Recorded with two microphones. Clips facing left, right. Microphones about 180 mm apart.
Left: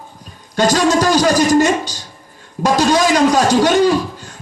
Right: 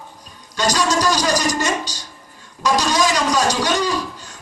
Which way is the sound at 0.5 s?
50° left (ahead or behind).